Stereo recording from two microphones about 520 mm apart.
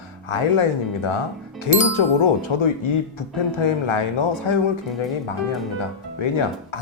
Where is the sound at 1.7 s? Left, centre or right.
Left.